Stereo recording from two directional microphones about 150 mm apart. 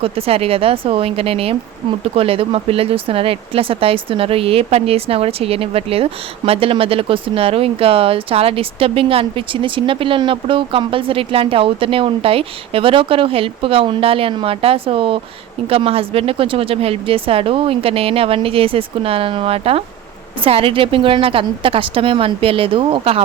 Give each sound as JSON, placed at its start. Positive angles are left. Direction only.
{"t": 0.0, "sound": "speech", "side_deg": -40}